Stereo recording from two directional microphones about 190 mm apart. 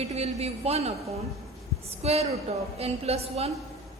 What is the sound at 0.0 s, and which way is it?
Speech, 35° right (ahead or behind).